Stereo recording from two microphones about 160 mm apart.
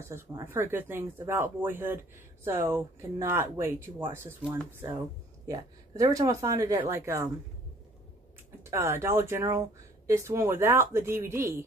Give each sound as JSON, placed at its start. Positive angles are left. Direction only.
{"t": 0.0, "sound": "speech", "side_deg": -15}
{"t": 5.5, "sound": "speech", "side_deg": -25}
{"t": 8.6, "sound": "speech", "side_deg": -15}